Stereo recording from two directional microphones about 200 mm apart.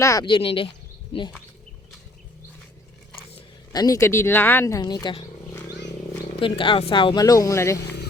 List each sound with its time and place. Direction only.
0.0 s speech: 15° left (ahead or behind)
3.7 s speech: 20° left (ahead or behind)
6.4 s speech: 25° left (ahead or behind)